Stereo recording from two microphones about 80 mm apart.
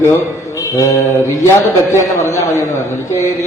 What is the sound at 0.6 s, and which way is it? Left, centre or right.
Mantra, left.